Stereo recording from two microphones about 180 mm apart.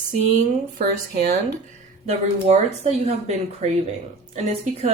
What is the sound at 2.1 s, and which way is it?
Speech, 40° right (ahead or behind).